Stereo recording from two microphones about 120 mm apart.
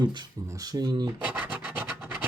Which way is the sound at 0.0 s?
35° right (ahead or behind).